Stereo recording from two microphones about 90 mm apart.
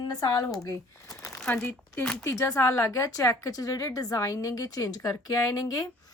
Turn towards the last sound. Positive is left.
turn(degrees=40)  # may be behind; listen again after turning